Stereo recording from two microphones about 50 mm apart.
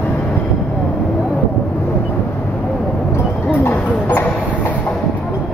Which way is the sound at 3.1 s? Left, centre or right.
Left.